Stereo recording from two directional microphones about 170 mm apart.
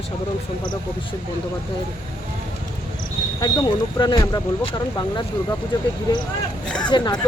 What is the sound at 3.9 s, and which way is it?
Speech, 25° left (ahead or behind).